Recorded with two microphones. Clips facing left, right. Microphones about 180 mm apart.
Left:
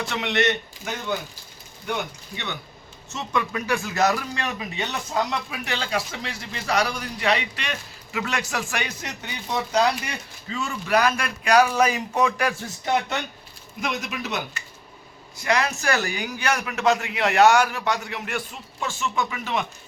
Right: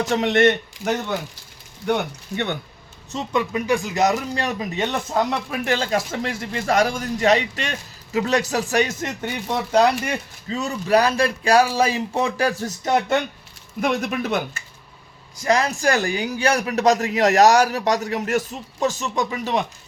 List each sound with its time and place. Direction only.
0.0 s speech: 40° right (ahead or behind)
3.1 s a man's voice: 30° right (ahead or behind)
3.5 s speech: 20° right (ahead or behind)
4.4 s speech: 40° right (ahead or behind)
10.5 s a man's voice: 40° right (ahead or behind)
13.8 s speech: 50° right (ahead or behind)
15.4 s a man's voice: 35° right (ahead or behind)